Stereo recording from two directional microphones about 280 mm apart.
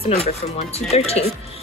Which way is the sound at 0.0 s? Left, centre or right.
Left.